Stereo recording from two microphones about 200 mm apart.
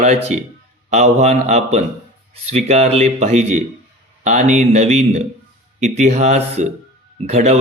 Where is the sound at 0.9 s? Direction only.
35° right (ahead or behind).